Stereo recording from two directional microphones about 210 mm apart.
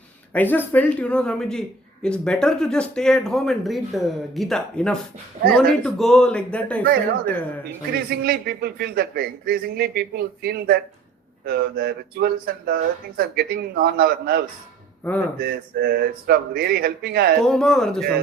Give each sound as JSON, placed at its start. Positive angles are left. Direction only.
{"t": 0.3, "sound": "a man's voice", "side_deg": 10}
{"t": 8.2, "sound": "speech", "side_deg": -50}
{"t": 15.0, "sound": "a man's voice", "side_deg": 5}
{"t": 15.4, "sound": "speech", "side_deg": -50}
{"t": 17.4, "sound": "a man's voice", "side_deg": 5}